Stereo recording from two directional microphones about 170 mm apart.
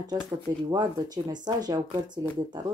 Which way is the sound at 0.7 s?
25° right (ahead or behind).